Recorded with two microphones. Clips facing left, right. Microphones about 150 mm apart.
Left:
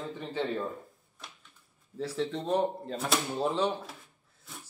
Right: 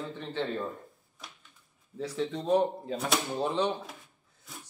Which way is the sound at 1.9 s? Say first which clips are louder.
Even; centre (ahead or behind).